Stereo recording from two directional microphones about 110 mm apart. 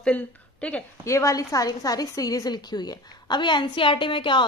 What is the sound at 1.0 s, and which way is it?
A woman's voice, 25° left (ahead or behind).